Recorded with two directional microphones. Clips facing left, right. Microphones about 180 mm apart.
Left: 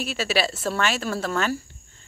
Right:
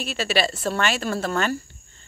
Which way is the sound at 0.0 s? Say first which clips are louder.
Right 1 dB; 5° left (ahead or behind).